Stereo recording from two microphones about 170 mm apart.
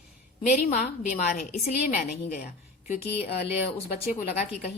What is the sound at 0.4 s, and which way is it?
A woman's voice, 45° left (ahead or behind).